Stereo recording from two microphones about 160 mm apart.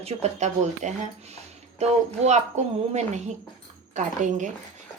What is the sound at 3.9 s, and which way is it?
Speech, 50° right (ahead or behind).